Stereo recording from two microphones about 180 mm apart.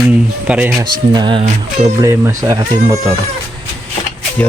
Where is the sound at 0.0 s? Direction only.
10° right (ahead or behind).